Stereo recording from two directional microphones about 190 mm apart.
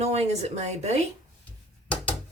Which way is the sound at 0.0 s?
35° right (ahead or behind).